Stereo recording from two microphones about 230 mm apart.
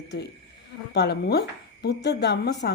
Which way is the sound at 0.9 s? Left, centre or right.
Left.